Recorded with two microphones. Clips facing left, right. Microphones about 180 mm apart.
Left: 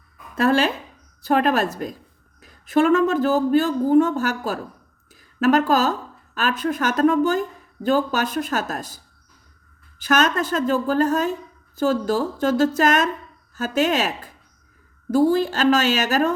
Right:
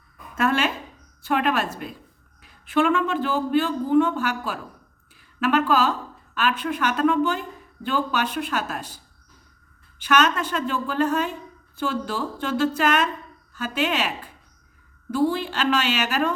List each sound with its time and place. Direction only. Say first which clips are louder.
0.3 s speech: left 4 dB; 35° left (ahead or behind)
10.0 s speech: left 1 dB; 40° left (ahead or behind)